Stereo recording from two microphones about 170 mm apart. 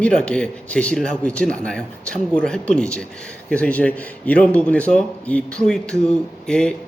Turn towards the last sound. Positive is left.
turn(degrees=5)  # may be behind; listen again after turning